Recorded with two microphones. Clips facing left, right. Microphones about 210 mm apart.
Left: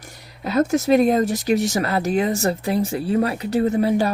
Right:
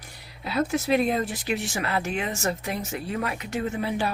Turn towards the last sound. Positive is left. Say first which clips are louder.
# left 9 dB
turn(degrees=40)  # may be behind; listen again after turning